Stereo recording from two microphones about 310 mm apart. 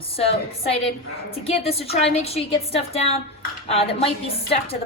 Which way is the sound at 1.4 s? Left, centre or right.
Centre.